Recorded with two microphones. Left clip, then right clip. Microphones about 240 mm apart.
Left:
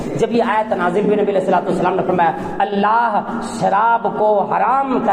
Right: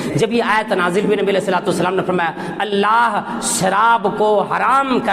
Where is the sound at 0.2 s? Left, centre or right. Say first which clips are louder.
Even; right.